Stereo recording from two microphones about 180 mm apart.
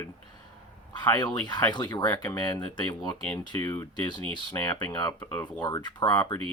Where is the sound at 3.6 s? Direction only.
20° left (ahead or behind).